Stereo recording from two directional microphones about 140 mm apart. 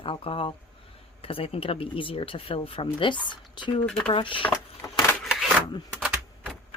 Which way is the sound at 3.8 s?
5° left (ahead or behind).